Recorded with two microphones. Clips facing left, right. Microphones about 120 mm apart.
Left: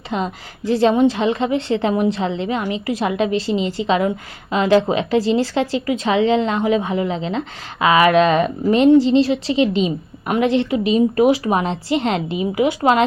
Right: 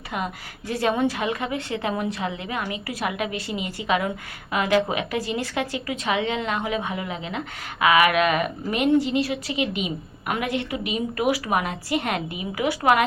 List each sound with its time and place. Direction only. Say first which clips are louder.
0.1 s speech: left 6 dB; 25° left (ahead or behind)